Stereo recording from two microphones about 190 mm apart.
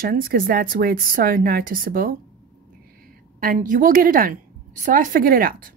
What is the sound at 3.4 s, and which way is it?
A woman's voice, 45° right (ahead or behind).